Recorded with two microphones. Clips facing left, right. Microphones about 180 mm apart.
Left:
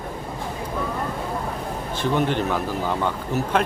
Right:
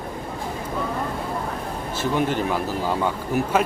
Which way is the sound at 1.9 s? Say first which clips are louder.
Left 1 dB; 5° right (ahead or behind).